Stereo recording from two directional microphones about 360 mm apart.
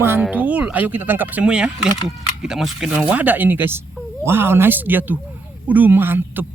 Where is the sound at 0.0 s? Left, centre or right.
Centre.